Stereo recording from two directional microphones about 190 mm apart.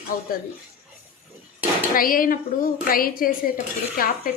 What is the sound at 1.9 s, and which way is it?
Speech, 50° left (ahead or behind).